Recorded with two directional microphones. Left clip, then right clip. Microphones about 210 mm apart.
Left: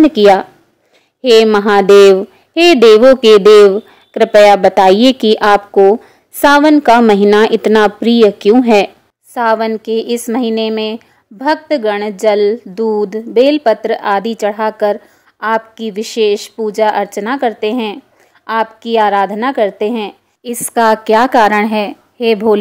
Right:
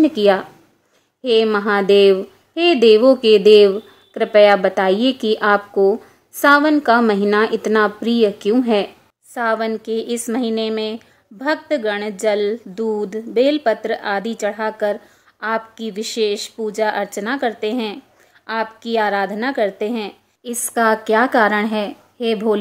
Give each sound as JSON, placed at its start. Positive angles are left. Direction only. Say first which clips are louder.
{"t": 0.0, "sound": "a woman's voice", "louder": "left 7 dB", "side_deg": 35}